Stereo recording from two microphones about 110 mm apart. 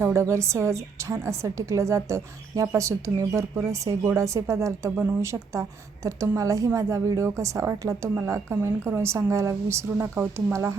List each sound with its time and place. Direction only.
0.0 s a woman's voice: 25° right (ahead or behind)